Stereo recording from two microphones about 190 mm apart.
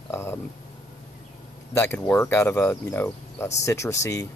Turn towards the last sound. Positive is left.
turn(degrees=15)  # may be behind; listen again after turning